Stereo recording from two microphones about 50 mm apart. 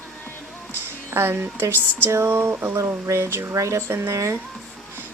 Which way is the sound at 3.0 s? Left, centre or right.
Right.